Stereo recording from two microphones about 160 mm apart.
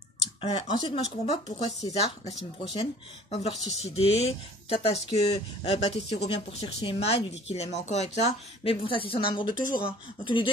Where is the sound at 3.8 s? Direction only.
40° left (ahead or behind).